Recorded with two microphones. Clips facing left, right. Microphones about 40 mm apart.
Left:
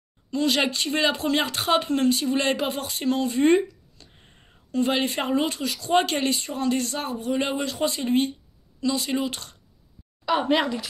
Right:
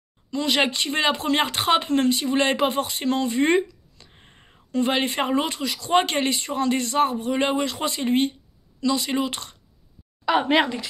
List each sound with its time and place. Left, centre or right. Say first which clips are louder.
0.3 s speech: right 1 dB; right
10.5 s speech: right 2 dB; right